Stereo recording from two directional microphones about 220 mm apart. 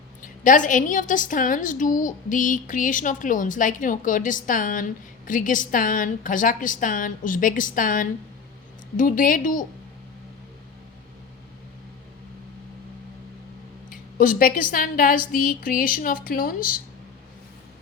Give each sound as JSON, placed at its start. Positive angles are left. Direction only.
{"t": 0.2, "sound": "a woman's voice", "side_deg": 35}
{"t": 13.9, "sound": "a woman's voice", "side_deg": 40}